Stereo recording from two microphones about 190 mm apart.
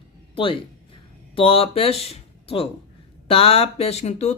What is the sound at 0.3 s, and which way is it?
Speech, 25° left (ahead or behind).